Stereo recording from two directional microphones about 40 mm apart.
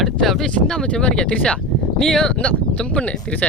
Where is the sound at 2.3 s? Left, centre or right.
Left.